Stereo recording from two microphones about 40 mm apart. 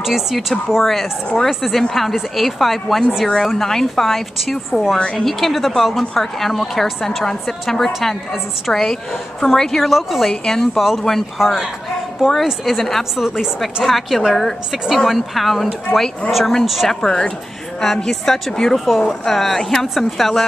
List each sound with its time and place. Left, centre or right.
0.0 s a woman's voice: centre
4.6 s a woman's voice: centre
5.1 s a woman's voice: centre
9.8 s a woman's voice: centre
10.3 s a woman's voice: centre
10.8 s a woman's voice: centre
12.6 s a woman's voice: centre
13.1 s a woman's voice: centre
13.8 s a woman's voice: centre
16.8 s a woman's voice: centre